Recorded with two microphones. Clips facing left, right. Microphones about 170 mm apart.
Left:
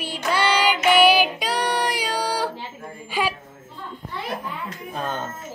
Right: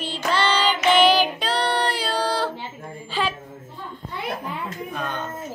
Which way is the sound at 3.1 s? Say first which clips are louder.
Left 1 dB; 10° left (ahead or behind).